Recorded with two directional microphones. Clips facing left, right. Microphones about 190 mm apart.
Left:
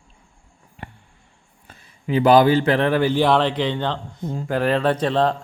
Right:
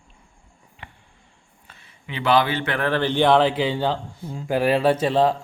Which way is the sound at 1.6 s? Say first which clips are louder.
Left 12 dB; 40° left (ahead or behind).